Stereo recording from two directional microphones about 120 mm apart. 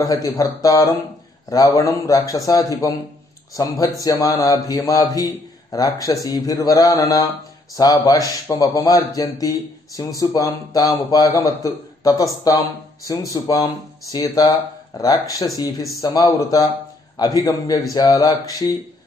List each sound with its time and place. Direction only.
0.0 s a man's voice: 30° left (ahead or behind)